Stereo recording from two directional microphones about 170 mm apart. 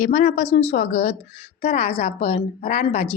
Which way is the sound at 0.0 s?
50° left (ahead or behind).